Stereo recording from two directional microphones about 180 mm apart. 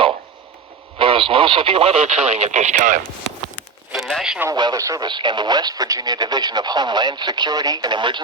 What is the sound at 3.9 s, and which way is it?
Speech, centre (ahead or behind).